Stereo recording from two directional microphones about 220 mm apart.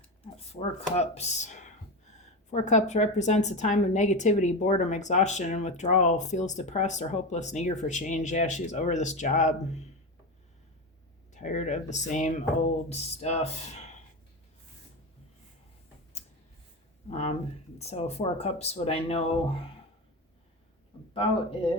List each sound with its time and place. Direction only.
0.5 s a woman's voice: 30° left (ahead or behind)
11.3 s a woman's voice: 30° left (ahead or behind)
17.1 s speech: 30° left (ahead or behind)
21.1 s speech: 25° left (ahead or behind)